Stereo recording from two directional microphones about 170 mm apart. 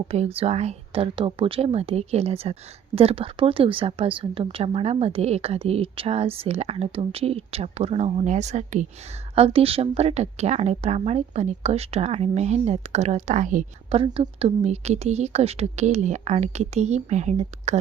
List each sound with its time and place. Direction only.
0.1 s speech: 35° right (ahead or behind)
13.9 s speech: 35° right (ahead or behind)